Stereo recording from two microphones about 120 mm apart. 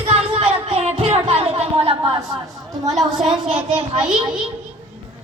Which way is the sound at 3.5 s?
55° right (ahead or behind).